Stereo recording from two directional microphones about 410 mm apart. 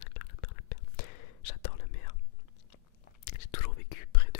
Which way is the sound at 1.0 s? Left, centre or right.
Left.